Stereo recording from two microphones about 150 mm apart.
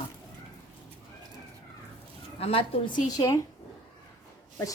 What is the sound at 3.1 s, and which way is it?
Speech, 25° left (ahead or behind).